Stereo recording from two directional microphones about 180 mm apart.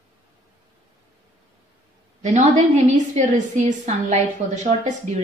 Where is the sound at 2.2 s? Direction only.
40° right (ahead or behind).